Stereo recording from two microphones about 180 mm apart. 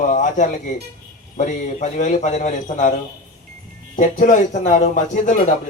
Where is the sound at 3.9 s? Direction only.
45° left (ahead or behind).